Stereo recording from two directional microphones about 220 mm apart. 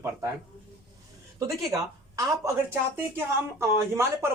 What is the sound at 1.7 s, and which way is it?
A woman's voice, 15° right (ahead or behind).